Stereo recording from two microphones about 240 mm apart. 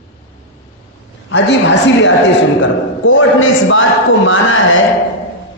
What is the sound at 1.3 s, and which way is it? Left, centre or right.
A man's voice, left.